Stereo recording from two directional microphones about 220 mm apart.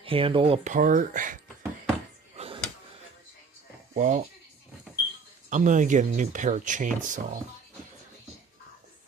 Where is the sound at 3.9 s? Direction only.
35° right (ahead or behind).